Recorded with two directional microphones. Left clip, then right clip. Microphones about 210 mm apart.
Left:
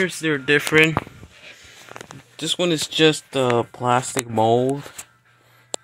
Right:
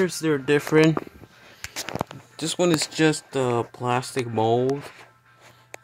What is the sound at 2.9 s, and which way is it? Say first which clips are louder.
Speech: left 5 dB; 10° left (ahead or behind).